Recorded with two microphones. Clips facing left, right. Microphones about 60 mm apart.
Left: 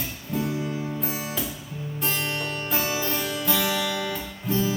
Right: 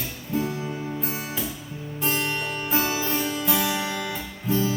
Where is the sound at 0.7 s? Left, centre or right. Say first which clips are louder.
Even; centre.